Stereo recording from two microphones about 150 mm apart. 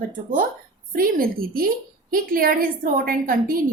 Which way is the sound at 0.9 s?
80° right.